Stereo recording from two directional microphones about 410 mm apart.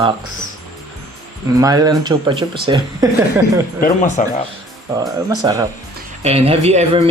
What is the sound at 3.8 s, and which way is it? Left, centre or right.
Speech, centre.